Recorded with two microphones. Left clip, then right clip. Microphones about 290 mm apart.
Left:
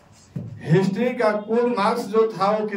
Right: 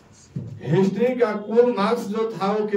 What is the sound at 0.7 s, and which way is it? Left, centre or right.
Speech, centre.